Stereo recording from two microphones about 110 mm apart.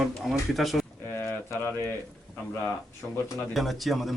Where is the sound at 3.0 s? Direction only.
10° left (ahead or behind).